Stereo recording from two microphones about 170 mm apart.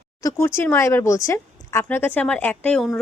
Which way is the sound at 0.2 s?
15° left (ahead or behind).